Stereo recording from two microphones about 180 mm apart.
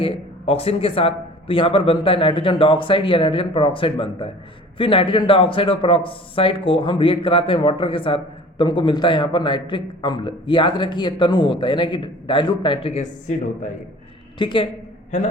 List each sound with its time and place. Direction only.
0.0 s speech: 30° left (ahead or behind)
14.3 s speech: 25° left (ahead or behind)